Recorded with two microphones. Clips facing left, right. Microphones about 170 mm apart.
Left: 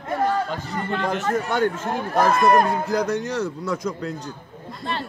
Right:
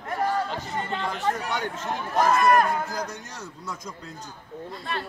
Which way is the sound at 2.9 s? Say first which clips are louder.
Left 11 dB; 70° left (ahead or behind).